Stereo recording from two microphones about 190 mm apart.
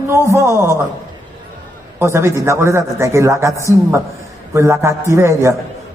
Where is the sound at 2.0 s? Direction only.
15° right (ahead or behind).